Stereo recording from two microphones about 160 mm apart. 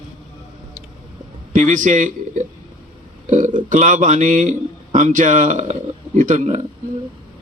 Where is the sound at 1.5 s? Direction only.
55° right (ahead or behind).